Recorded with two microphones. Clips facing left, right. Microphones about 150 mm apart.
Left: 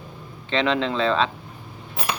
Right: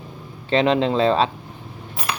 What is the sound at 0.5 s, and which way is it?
Speech, 35° right (ahead or behind).